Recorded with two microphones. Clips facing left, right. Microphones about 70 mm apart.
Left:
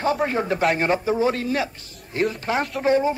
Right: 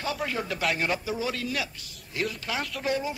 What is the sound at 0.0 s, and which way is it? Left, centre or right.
Speech, left.